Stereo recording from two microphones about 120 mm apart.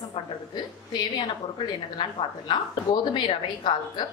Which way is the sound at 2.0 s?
45° left (ahead or behind).